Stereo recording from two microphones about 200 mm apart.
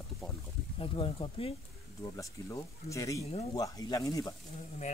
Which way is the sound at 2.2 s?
15° left (ahead or behind).